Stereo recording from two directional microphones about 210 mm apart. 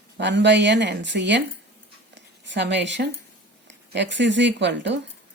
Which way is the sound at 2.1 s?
55° right (ahead or behind).